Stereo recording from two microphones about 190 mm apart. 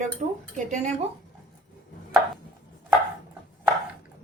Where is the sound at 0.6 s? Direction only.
40° right (ahead or behind).